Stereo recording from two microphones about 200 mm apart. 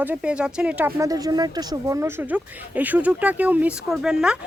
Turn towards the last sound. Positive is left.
turn(degrees=-5)  # may be behind; listen again after turning